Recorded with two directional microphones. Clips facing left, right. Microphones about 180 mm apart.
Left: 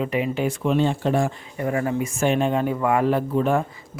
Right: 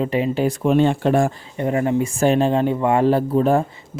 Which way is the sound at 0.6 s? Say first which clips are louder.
Right 5 dB; 55° right (ahead or behind).